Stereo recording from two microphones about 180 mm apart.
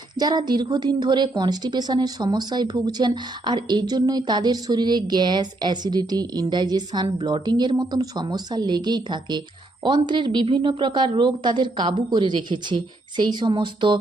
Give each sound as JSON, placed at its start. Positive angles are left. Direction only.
{"t": 0.2, "sound": "a woman's voice", "side_deg": -25}